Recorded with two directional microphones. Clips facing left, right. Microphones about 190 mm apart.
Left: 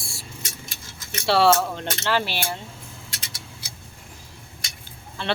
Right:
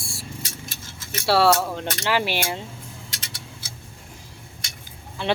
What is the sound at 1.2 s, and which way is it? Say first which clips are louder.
Speech: even; 5° right (ahead or behind).